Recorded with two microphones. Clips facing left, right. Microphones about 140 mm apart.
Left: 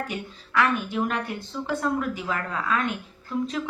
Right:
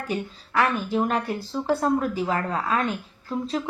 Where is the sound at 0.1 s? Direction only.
35° right (ahead or behind).